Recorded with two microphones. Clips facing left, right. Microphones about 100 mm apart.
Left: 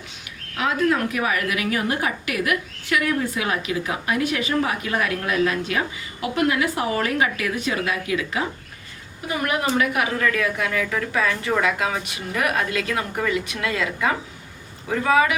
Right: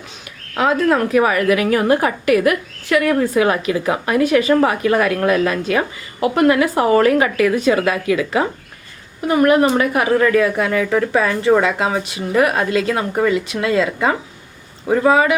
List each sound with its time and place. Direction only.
0.9 s speech: 45° right (ahead or behind)
3.1 s a woman's voice: 50° right (ahead or behind)
7.6 s speech: 65° right (ahead or behind)
9.2 s a woman's voice: 45° right (ahead or behind)